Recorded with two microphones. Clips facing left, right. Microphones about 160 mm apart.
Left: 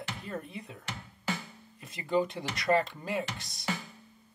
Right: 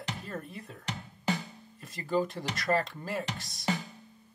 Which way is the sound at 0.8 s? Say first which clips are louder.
Right 5 dB; 20° right (ahead or behind).